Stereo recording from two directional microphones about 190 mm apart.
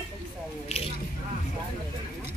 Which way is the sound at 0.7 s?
35° left (ahead or behind).